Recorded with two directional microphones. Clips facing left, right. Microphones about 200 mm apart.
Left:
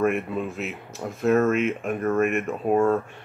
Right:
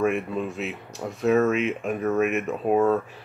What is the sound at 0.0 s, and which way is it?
Speech, centre (ahead or behind).